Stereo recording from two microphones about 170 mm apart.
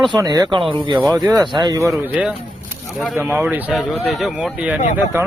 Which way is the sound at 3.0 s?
Centre (ahead or behind).